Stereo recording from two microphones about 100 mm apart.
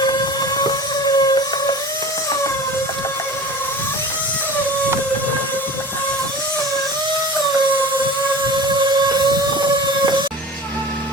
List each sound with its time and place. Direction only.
0.0 s vehicle: 40° left (ahead or behind)
1.0 s a sound: 45° left (ahead or behind)
8.8 s train: 45° right (ahead or behind)